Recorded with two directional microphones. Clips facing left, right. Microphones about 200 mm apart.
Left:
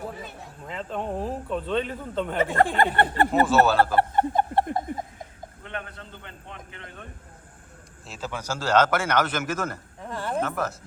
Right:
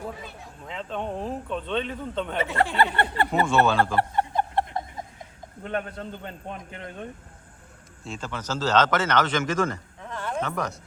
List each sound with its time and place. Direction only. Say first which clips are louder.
0.7 s speech: left 1 dB; 5° left (ahead or behind)
2.4 s speech: left 2 dB; 50° left (ahead or behind)
3.4 s speech: left 1 dB; 5° left (ahead or behind)
4.1 s a sound: left 3 dB; 50° left (ahead or behind)
5.6 s a man's voice: right 7 dB; 40° right (ahead or behind)
8.0 s speech: even; 5° left (ahead or behind)